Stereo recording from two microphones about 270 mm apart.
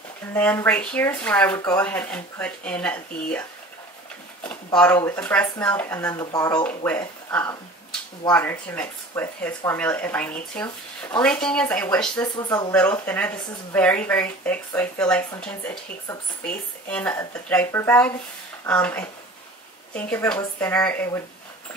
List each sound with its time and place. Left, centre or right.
0.3 s speech: centre
4.4 s speech: centre